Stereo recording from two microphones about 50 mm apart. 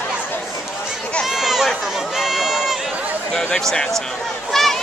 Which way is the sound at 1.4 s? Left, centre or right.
Centre.